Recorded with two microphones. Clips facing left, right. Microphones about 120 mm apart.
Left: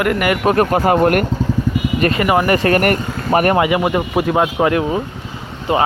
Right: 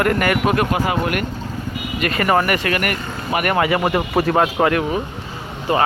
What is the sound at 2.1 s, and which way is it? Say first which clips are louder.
Speech: right 1 dB; 15° left (ahead or behind).